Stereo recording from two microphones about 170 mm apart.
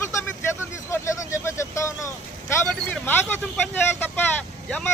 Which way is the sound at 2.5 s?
10° left (ahead or behind).